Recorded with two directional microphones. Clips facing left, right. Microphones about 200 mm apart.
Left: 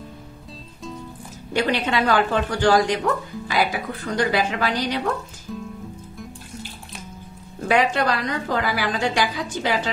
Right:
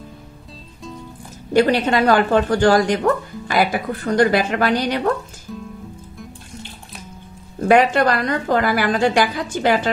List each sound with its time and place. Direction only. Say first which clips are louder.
1.5 s a woman's voice: right 6 dB; 45° right (ahead or behind)
5.5 s music: even; centre (ahead or behind)
7.6 s a woman's voice: right 6 dB; 50° right (ahead or behind)